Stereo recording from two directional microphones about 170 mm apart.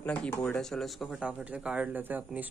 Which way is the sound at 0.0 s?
10° left (ahead or behind).